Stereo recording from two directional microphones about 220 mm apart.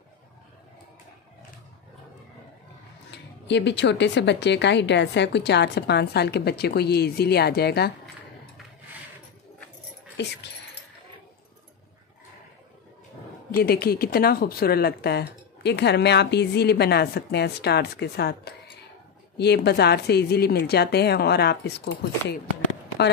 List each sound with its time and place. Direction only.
3.1 s speech: 50° left (ahead or behind)
10.1 s speech: 50° left (ahead or behind)
13.6 s speech: 45° left (ahead or behind)